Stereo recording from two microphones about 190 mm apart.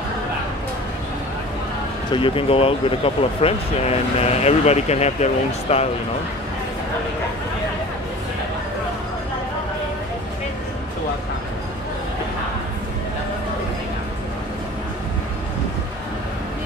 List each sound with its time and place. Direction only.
2.1 s speech: 30° left (ahead or behind)